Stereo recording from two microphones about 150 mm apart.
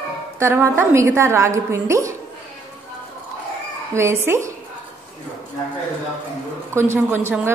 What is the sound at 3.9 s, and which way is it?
Speech, 15° right (ahead or behind).